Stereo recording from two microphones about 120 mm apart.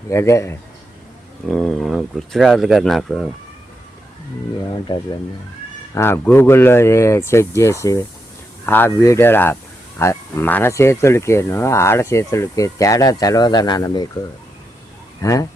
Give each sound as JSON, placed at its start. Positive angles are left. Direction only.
{"t": 0.1, "sound": "speech", "side_deg": 25}
{"t": 1.5, "sound": "speech", "side_deg": 5}
{"t": 5.9, "sound": "speech", "side_deg": 20}
{"t": 15.2, "sound": "speech", "side_deg": 30}